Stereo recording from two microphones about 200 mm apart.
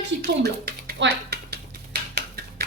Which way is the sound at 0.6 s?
55° right (ahead or behind).